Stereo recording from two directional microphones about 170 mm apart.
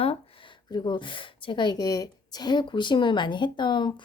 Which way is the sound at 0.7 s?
25° left (ahead or behind).